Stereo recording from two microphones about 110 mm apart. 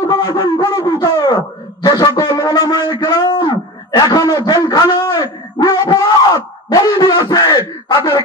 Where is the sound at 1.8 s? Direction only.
40° left (ahead or behind).